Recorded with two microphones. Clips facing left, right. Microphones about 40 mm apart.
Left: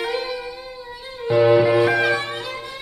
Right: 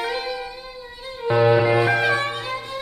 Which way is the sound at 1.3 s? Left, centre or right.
Centre.